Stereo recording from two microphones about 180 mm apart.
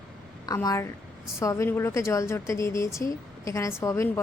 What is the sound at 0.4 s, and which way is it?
Speech, 20° left (ahead or behind).